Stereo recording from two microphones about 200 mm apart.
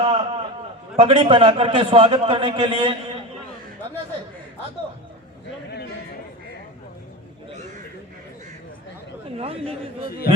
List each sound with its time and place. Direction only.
0.0 s a sound: 30° right (ahead or behind)
0.9 s a man's voice: 25° right (ahead or behind)
9.4 s a man's voice: 30° right (ahead or behind)